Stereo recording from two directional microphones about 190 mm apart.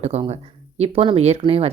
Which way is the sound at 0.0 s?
35° right (ahead or behind).